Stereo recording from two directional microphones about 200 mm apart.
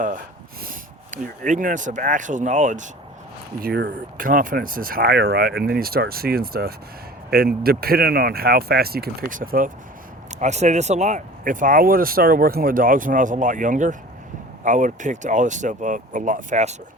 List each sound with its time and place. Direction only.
0.6 s speech: 40° right (ahead or behind)
3.6 s speech: 55° right (ahead or behind); by 16.7 s 35° right (ahead or behind)